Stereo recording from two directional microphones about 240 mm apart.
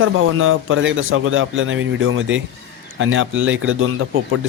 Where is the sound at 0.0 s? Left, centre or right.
Right.